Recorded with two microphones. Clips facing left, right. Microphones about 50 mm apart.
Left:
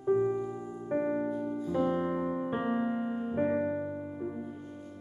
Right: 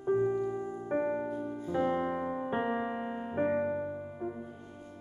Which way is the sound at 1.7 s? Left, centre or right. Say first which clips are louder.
Even; centre.